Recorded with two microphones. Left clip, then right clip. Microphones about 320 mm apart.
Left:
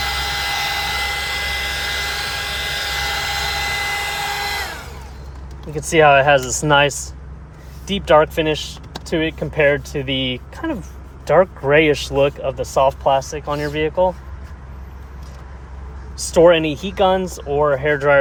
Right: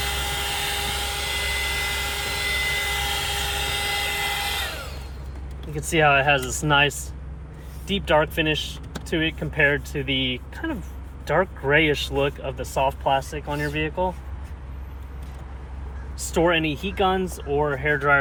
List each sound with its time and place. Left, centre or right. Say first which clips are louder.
0.1 s vehicle: left 6 dB; centre
3.7 s a sound: left 4 dB; centre
5.7 s speech: left 7 dB; left
16.1 s speech: left 9 dB; left